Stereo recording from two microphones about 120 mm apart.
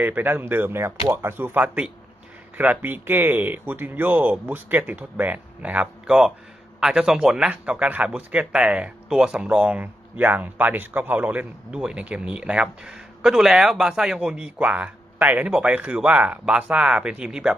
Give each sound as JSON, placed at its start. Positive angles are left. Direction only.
{"t": 0.0, "sound": "a man's voice", "side_deg": -15}